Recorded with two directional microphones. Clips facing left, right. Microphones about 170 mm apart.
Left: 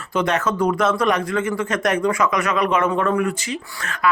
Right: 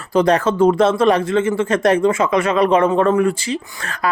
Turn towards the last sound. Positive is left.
turn(degrees=-35)  # may be behind; listen again after turning